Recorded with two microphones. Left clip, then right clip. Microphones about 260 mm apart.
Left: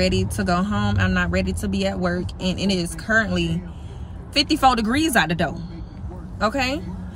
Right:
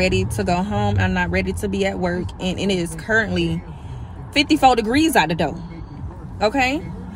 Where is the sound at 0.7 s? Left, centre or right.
Right.